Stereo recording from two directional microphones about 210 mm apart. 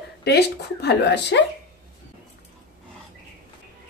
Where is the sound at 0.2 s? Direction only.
50° left (ahead or behind).